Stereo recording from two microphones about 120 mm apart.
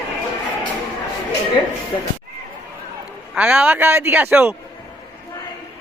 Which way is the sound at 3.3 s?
10° right (ahead or behind).